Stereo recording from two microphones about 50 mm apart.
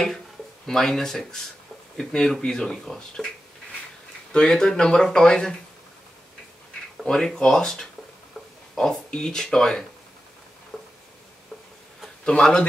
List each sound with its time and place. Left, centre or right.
0.7 s speech: centre
4.3 s speech: centre
7.1 s speech: centre
10.7 s a sound: centre
12.3 s speech: centre